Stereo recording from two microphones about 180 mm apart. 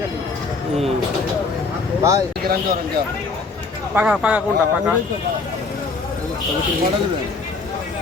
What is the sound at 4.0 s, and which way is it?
Speech, 5° right (ahead or behind).